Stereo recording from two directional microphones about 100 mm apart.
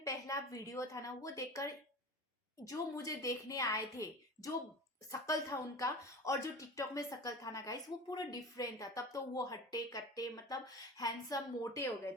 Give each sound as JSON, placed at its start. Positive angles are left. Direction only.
{"t": 0.0, "sound": "speech", "side_deg": 35}